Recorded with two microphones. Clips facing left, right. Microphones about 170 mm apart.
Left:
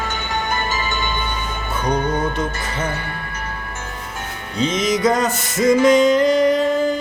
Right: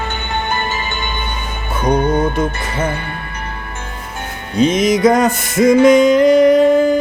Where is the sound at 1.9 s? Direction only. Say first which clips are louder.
Right 6 dB; 25° right (ahead or behind).